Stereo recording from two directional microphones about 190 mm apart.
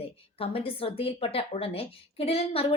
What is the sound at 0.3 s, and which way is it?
A woman's voice, 30° left (ahead or behind).